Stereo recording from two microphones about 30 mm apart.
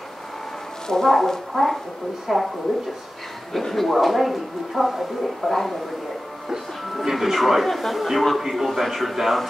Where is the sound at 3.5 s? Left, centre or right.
Centre.